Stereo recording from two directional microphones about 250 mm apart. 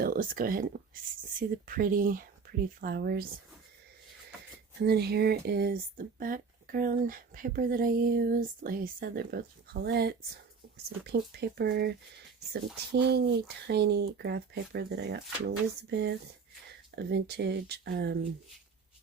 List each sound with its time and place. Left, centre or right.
0.0 s speech: right
4.8 s speech: right